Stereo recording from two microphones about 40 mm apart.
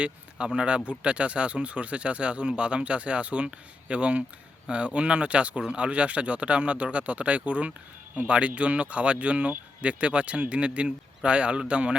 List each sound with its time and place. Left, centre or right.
0.0 s speech: right